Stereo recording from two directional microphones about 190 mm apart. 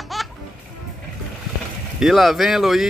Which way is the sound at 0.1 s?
Centre (ahead or behind).